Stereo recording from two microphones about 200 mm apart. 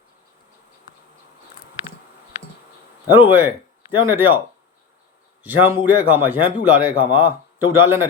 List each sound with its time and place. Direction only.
3.2 s speech: 10° right (ahead or behind)
5.4 s a man's voice: 10° right (ahead or behind)